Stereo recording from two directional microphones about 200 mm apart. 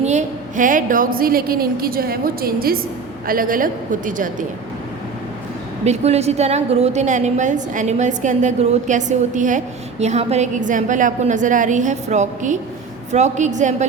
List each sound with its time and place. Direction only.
0.0 s a woman's voice: 35° right (ahead or behind)
5.8 s a woman's voice: 35° right (ahead or behind)